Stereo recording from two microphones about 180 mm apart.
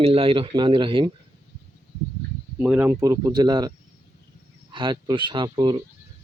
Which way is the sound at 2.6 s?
10° right (ahead or behind).